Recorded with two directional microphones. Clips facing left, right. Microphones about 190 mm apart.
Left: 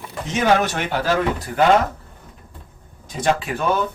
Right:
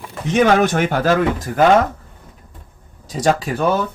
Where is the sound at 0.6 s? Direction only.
50° right (ahead or behind).